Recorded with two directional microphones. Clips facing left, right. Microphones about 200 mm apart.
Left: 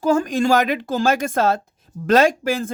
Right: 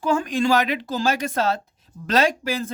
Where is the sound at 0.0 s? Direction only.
40° left (ahead or behind).